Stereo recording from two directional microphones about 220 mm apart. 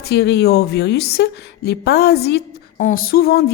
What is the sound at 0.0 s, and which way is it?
Speech, 50° left (ahead or behind).